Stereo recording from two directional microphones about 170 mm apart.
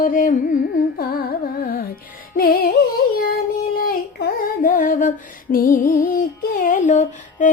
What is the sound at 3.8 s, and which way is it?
Female singing, 55° left (ahead or behind).